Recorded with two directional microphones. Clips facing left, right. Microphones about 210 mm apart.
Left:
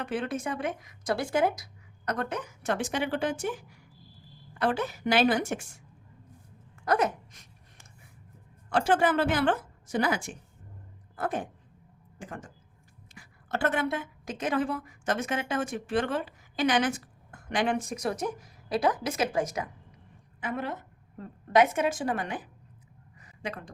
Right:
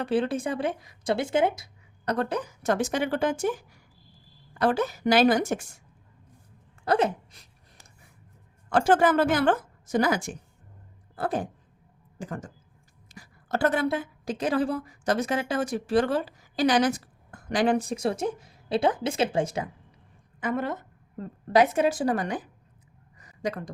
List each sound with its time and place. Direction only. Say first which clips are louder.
0.0 s speech: right 6 dB; 30° right (ahead or behind)
4.5 s speech: right 4 dB; 40° right (ahead or behind)
6.8 s a sound: right 3 dB; 30° right (ahead or behind)
8.7 s a woman's voice: right 4 dB; 45° right (ahead or behind); by 19.7 s 30° right (ahead or behind)
20.4 s a woman's voice: right 5 dB; 45° right (ahead or behind)
21.2 s speech: right 2 dB; 35° right (ahead or behind)
23.1 s a sound: right 6 dB; 40° right (ahead or behind)